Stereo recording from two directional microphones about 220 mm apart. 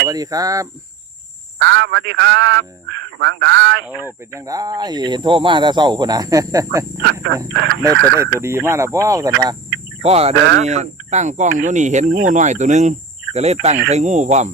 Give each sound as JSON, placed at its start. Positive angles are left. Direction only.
{"t": 0.0, "sound": "speech", "side_deg": -15}
{"t": 1.5, "sound": "a man's voice", "side_deg": -55}
{"t": 3.8, "sound": "speech", "side_deg": -5}
{"t": 7.0, "sound": "a man's voice", "side_deg": -50}
{"t": 8.4, "sound": "speech", "side_deg": -10}
{"t": 10.0, "sound": "speech", "side_deg": -30}